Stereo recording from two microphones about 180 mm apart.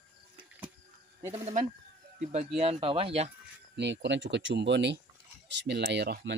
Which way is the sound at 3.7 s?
75° right (ahead or behind).